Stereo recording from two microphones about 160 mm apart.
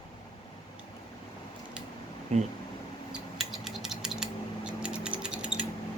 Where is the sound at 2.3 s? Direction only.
45° right (ahead or behind).